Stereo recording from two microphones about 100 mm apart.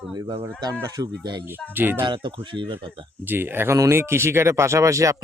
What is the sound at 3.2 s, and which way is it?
Speech, 20° right (ahead or behind).